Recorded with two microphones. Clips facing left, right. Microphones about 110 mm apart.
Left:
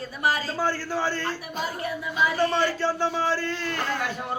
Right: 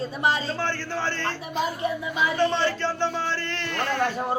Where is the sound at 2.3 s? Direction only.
10° left (ahead or behind).